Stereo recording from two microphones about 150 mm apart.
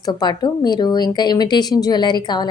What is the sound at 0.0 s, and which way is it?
A woman's voice, 30° left (ahead or behind).